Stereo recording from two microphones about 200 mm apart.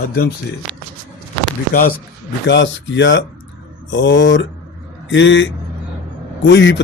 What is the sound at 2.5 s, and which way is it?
Speech, 65° left (ahead or behind).